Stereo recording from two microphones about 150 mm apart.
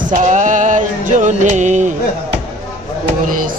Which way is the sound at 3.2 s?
65° right (ahead or behind).